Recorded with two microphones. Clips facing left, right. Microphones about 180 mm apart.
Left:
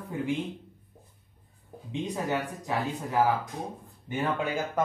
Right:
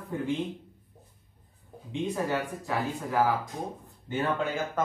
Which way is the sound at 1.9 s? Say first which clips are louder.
Right 1 dB; 15° left (ahead or behind).